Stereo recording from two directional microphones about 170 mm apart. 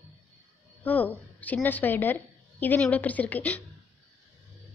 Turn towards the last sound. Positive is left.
turn(degrees=10)  # may be behind; listen again after turning